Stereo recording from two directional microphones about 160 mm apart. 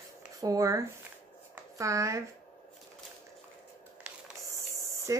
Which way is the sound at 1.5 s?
20° right (ahead or behind).